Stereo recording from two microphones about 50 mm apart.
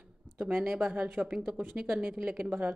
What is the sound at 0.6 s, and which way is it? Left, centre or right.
Speech, right.